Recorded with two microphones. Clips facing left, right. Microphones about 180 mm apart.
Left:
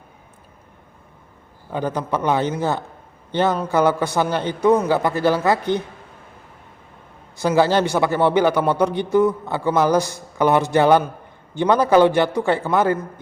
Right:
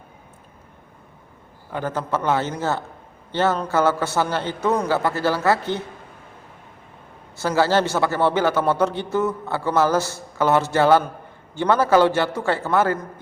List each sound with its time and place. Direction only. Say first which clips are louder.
1.7 s a man's voice: left 2 dB; 15° left (ahead or behind)
7.3 s a man's voice: left 2 dB; 15° left (ahead or behind)